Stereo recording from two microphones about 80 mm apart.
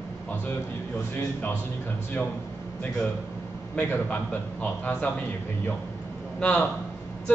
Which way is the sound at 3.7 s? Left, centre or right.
Left.